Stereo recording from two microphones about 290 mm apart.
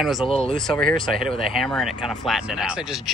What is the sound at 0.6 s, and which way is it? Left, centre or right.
Speech, centre.